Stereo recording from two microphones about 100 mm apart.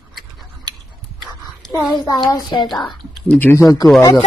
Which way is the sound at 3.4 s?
25° left (ahead or behind).